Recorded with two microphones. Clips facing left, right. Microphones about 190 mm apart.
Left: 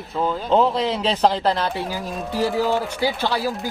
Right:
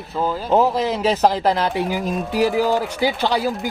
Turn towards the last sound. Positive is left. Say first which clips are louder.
# right 3 dB
turn(degrees=-15)  # may be behind; listen again after turning